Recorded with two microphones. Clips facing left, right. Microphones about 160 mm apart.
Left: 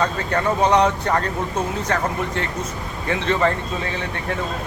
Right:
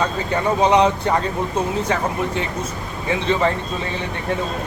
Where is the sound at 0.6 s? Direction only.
20° right (ahead or behind).